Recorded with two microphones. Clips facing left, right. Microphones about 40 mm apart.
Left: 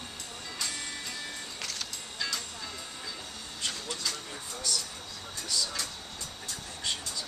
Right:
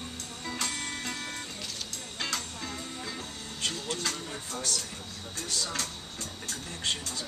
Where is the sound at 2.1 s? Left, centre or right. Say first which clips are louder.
Right 1 dB; right.